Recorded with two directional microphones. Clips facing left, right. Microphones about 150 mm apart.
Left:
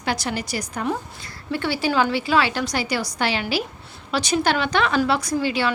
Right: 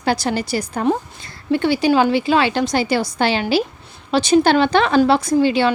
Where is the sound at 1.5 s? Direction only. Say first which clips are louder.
Right 7 dB; 20° right (ahead or behind).